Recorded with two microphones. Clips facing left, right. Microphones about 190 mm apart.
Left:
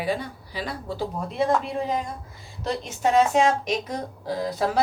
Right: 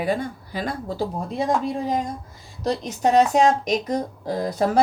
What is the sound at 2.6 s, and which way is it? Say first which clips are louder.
Speech: right 3 dB; 40° right (ahead or behind).